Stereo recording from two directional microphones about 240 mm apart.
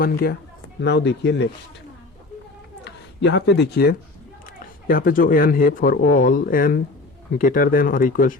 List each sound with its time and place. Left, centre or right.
0.0 s speech: left
2.8 s speech: left